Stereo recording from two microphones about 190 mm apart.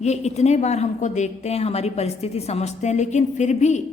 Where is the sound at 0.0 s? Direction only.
35° left (ahead or behind).